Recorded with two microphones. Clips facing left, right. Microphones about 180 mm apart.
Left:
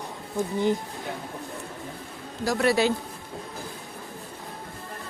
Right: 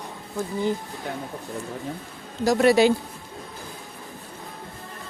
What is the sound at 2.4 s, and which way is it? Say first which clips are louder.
Speech: right 5 dB; 20° right (ahead or behind).